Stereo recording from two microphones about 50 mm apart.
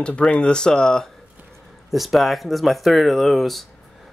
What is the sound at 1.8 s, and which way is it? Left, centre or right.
Speech, centre.